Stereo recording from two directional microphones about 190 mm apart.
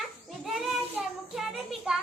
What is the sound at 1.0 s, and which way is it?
Child singing, centre (ahead or behind).